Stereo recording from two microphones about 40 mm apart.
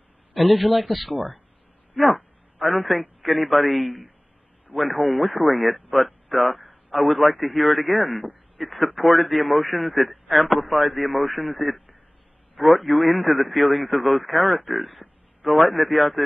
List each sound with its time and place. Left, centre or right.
0.3 s a man's voice: centre
2.0 s a sound: centre
2.8 s a man's voice: centre
11.6 s a man's voice: right
12.5 s a man's voice: centre